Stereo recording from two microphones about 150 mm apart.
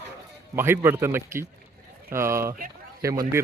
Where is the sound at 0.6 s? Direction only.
15° right (ahead or behind).